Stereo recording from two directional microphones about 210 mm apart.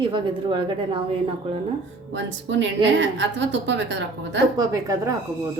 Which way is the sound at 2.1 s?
60° right (ahead or behind).